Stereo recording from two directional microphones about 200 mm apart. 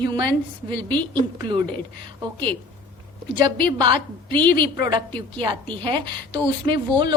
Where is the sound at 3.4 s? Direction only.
20° right (ahead or behind).